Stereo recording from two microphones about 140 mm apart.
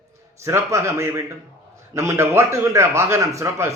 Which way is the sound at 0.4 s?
20° right (ahead or behind).